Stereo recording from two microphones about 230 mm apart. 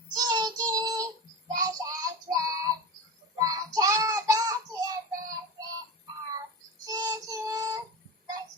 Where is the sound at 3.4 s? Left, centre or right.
Centre.